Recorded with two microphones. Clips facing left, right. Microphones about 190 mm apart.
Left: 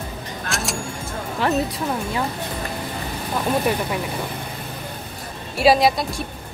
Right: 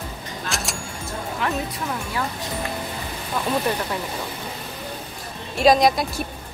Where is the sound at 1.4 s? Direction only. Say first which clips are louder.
Left 5 dB; 30° left (ahead or behind).